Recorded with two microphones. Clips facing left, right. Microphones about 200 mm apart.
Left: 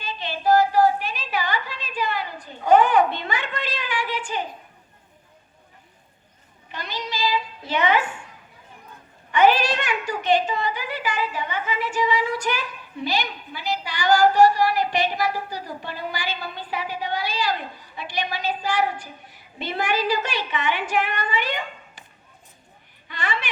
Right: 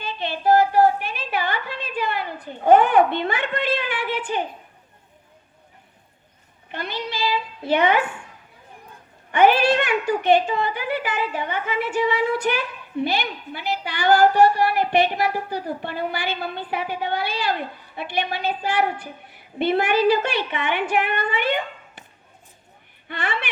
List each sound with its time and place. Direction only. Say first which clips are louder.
0.0 s a sound: right 2 dB; 60° right (ahead or behind)
6.7 s a woman's voice: right 3 dB; 55° right (ahead or behind)
9.3 s a woman's voice: right 2 dB; 55° right (ahead or behind)
23.0 s a woman's voice: right 1 dB; 60° right (ahead or behind)